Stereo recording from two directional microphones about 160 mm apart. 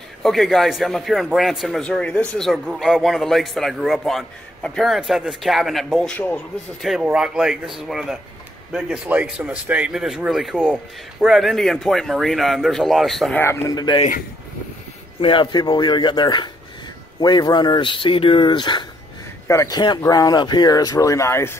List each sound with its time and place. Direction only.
0.2 s a man's voice: centre (ahead or behind)
13.4 s speech: 15° left (ahead or behind)
15.1 s speech: 35° left (ahead or behind); by 21.5 s 15° left (ahead or behind)